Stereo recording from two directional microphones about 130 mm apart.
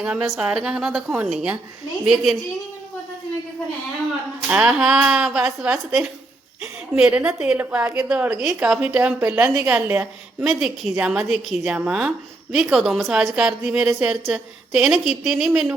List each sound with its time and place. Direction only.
0.0 s a woman's voice: 5° right (ahead or behind)
4.4 s a woman's voice: 5° right (ahead or behind)
9.8 s a woman's voice: 20° right (ahead or behind)
10.6 s a woman's voice: 5° right (ahead or behind)